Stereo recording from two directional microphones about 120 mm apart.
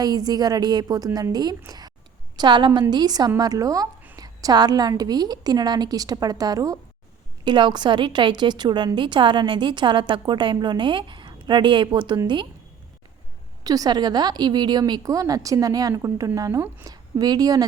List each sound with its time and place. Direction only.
0.0 s a woman's voice: 35° right (ahead or behind)
13.7 s a woman's voice: 30° right (ahead or behind)